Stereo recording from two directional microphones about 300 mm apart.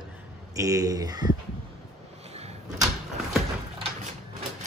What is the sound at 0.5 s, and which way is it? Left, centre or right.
Speech, centre.